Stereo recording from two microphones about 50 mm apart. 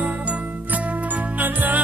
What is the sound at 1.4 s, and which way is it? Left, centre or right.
Music, right.